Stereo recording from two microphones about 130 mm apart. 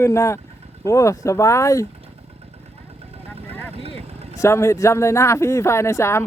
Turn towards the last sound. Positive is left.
turn(degrees=20)  # may be behind; listen again after turning